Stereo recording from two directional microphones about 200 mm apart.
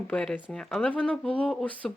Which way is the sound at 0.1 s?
5° left (ahead or behind).